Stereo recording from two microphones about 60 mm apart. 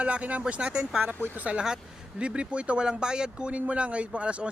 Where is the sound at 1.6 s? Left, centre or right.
Centre.